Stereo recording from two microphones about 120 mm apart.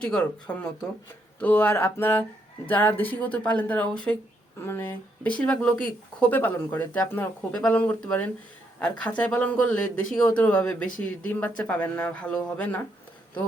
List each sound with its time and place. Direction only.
0.0 s speech: 10° left (ahead or behind)